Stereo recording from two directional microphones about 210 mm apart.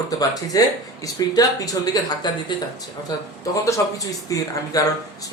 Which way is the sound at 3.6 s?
15° left (ahead or behind).